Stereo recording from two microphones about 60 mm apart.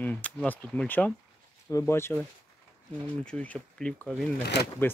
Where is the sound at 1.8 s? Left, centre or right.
Left.